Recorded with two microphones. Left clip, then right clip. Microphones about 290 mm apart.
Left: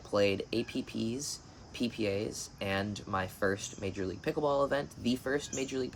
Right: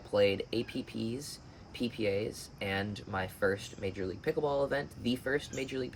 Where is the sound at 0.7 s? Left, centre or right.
Left.